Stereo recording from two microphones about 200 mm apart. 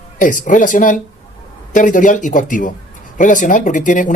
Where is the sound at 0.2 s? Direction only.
40° left (ahead or behind).